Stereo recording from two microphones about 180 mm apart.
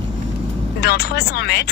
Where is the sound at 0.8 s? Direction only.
65° left (ahead or behind).